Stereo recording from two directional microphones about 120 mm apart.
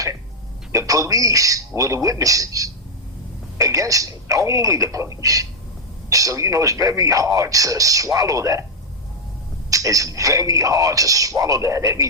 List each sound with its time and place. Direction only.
0.7 s a man's voice: 25° right (ahead or behind)
5.2 s a sound: 30° right (ahead or behind)
6.1 s a man's voice: 30° right (ahead or behind)
9.6 s a man's voice: 30° right (ahead or behind)